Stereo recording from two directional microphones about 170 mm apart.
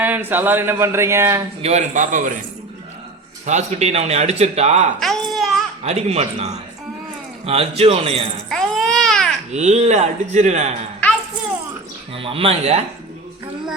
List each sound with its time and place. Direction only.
0.0 s speech: 10° right (ahead or behind)
1.6 s speech: 45° right (ahead or behind)
3.4 s speech: 40° right (ahead or behind)
4.9 s baby cry: centre (ahead or behind)
5.8 s speech: 40° right (ahead or behind)
8.4 s baby cry: centre (ahead or behind)
9.5 s speech: 40° right (ahead or behind)
12.1 s speech: 35° right (ahead or behind)